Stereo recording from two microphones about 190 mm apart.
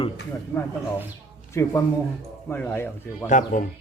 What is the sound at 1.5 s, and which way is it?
Speech, 15° left (ahead or behind).